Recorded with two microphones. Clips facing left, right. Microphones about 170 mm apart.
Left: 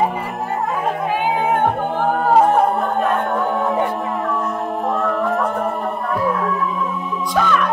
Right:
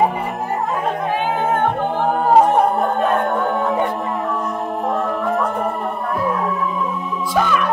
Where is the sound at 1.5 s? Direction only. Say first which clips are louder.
Even; 5° left (ahead or behind).